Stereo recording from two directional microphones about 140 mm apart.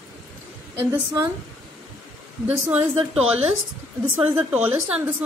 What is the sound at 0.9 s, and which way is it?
Speech, 25° right (ahead or behind).